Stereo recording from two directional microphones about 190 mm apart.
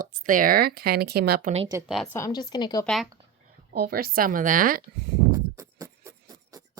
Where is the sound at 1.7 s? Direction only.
15° right (ahead or behind).